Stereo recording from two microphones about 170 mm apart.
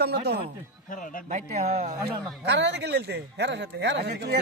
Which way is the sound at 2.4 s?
90° right.